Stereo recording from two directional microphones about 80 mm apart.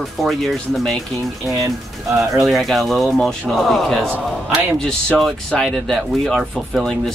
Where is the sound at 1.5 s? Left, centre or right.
Right.